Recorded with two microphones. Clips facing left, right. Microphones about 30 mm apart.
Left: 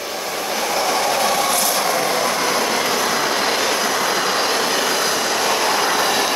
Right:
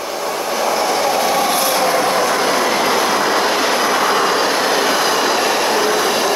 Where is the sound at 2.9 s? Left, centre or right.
Right.